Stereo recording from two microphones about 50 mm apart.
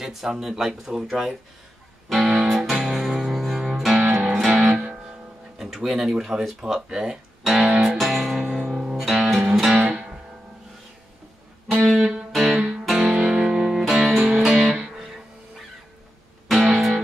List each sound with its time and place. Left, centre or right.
0.0 s speech: centre
2.0 s music: centre
5.6 s speech: centre
7.7 s music: centre
12.4 s music: centre
13.1 s music: centre
14.1 s music: centre
14.5 s guitar: centre
16.4 s music: centre